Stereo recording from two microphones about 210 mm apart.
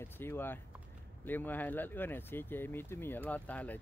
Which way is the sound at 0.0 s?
10° left (ahead or behind).